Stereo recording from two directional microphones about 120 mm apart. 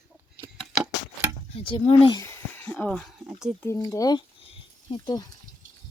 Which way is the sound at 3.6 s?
25° left (ahead or behind).